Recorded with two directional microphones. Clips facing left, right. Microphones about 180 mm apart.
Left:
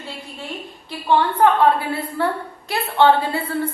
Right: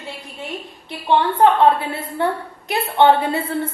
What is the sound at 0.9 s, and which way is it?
A woman's voice, 20° right (ahead or behind).